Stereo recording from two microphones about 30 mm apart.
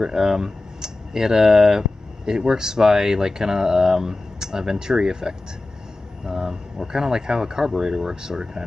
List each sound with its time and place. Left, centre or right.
0.0 s speech: right